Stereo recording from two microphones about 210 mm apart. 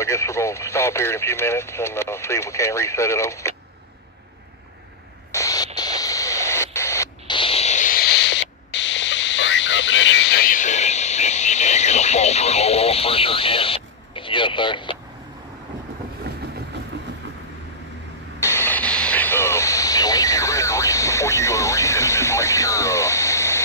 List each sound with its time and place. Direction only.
0.0 s speech: 15° left (ahead or behind)
5.3 s static: 15° left (ahead or behind)
5.8 s a sound: 15° left (ahead or behind)
16.3 s vehicle: 50° right (ahead or behind)
18.4 s vehicle: 10° left (ahead or behind)